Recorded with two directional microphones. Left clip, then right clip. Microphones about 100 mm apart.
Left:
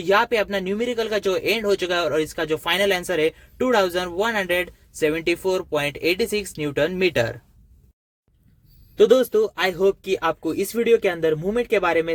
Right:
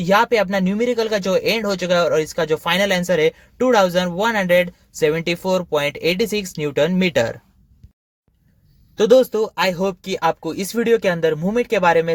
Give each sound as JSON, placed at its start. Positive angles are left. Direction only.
{"t": 0.0, "sound": "speech", "side_deg": -40}
{"t": 9.0, "sound": "speech", "side_deg": -30}